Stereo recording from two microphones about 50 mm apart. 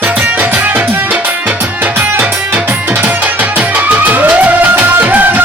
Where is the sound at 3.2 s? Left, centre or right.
Right.